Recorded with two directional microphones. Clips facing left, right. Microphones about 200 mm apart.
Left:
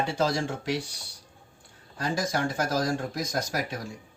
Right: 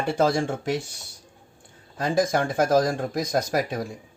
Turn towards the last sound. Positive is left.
turn(degrees=-55)  # may be behind; listen again after turning